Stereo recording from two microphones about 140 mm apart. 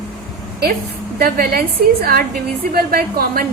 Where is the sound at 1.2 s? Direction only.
90° right.